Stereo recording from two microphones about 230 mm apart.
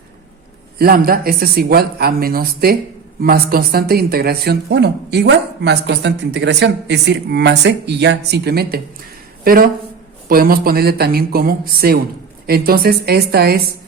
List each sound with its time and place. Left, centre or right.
0.8 s speech: right